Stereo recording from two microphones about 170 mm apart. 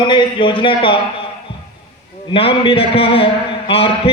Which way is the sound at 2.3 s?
35° left (ahead or behind).